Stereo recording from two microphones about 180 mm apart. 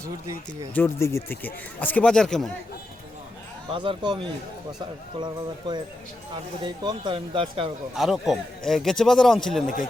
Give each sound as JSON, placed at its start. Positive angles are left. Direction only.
{"t": 0.0, "sound": "speech", "side_deg": -15}
{"t": 0.7, "sound": "speech", "side_deg": 10}
{"t": 3.7, "sound": "speech", "side_deg": -25}
{"t": 7.9, "sound": "speech", "side_deg": 0}